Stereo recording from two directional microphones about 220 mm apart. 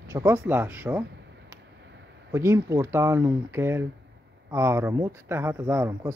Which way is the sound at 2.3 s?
10° right (ahead or behind).